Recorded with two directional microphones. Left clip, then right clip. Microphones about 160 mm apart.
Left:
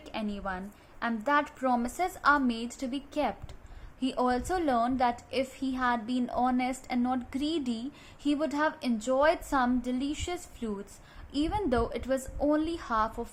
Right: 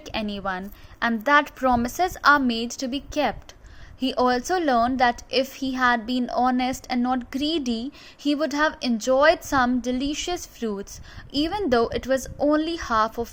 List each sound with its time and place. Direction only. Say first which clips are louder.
0.0 s a woman's voice: right 7 dB; 40° right (ahead or behind)